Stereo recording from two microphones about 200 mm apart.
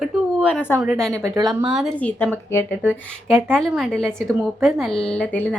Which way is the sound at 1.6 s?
Centre (ahead or behind).